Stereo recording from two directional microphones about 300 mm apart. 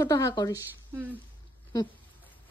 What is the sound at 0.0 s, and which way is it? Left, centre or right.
Speech, centre.